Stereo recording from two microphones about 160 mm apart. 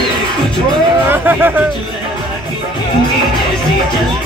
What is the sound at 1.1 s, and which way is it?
Speech, 10° right (ahead or behind).